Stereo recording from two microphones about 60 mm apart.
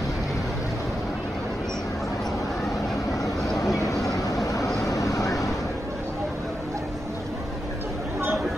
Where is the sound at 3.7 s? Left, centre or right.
Left.